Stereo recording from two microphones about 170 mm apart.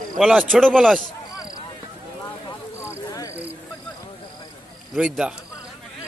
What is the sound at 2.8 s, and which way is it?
Cricket, 15° left (ahead or behind).